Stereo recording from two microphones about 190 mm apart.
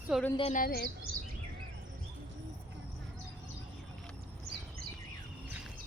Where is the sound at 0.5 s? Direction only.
50° left (ahead or behind).